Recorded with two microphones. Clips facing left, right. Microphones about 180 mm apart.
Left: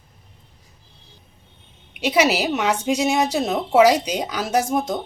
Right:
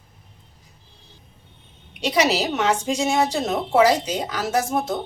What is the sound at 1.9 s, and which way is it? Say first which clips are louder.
A woman's voice: left 2 dB; 5° left (ahead or behind).